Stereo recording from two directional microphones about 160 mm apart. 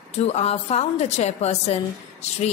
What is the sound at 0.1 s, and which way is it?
A woman's voice, 40° left (ahead or behind).